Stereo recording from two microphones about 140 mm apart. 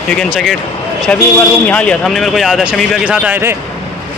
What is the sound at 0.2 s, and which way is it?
Speech, centre (ahead or behind).